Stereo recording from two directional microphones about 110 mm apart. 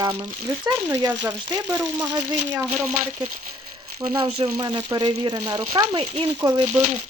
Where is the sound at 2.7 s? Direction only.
90° right.